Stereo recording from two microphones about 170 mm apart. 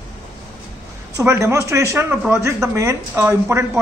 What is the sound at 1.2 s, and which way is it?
A man's voice, 15° right (ahead or behind).